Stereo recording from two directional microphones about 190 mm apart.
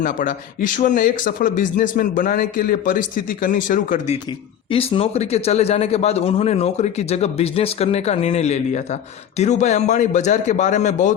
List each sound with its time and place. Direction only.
0.0 s speech: 45° left (ahead or behind)
4.3 s speech: 30° left (ahead or behind)